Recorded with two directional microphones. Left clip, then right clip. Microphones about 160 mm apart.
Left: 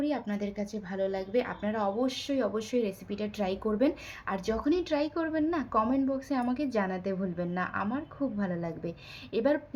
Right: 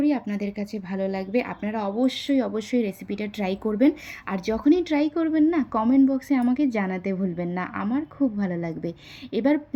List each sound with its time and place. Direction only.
0.0 s speech: 30° right (ahead or behind)